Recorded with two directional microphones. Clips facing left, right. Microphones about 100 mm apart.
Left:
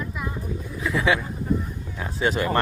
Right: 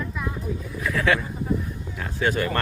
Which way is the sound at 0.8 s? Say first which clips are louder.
Even; 15° left (ahead or behind).